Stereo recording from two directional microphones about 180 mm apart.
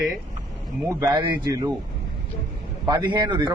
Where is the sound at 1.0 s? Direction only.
25° right (ahead or behind).